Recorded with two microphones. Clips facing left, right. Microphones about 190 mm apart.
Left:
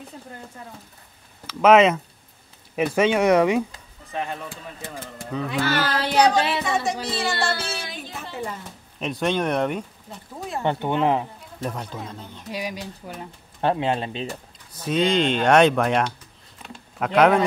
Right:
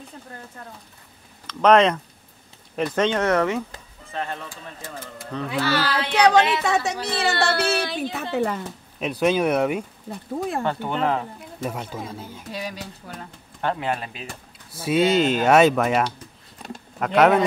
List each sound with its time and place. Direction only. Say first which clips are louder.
1.5 s speech: left 1 dB; 5° left (ahead or behind)
4.5 s speech: left 1 dB; 60° left (ahead or behind)
5.6 s child singing: right 1 dB; 50° left (ahead or behind)
6.6 s a woman's voice: right 1 dB; 70° right (ahead or behind)
9.0 s speech: right 3 dB; 5° right (ahead or behind)
10.6 s speech: left 7 dB; 20° left (ahead or behind)
11.6 s speech: right 1 dB; 5° right (ahead or behind)
12.5 s speech: left 2 dB; 10° left (ahead or behind)
13.6 s speech: left 3 dB; 25° left (ahead or behind)
14.7 s speech: right 2 dB; 10° right (ahead or behind)